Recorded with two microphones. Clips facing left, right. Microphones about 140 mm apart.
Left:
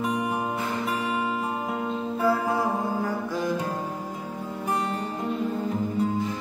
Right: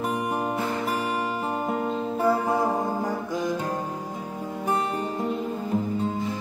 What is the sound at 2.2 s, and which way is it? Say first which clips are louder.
Music: right 1 dB; 15° right (ahead or behind).